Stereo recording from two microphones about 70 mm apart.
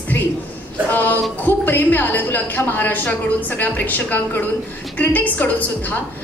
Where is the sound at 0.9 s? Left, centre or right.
Left.